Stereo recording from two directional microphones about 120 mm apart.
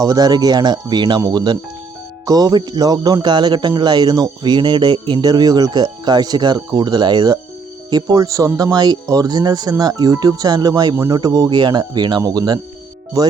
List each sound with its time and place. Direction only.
0.0 s speech: 30° right (ahead or behind)